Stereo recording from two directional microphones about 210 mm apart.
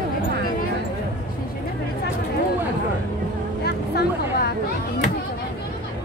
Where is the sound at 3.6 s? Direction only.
50° left (ahead or behind).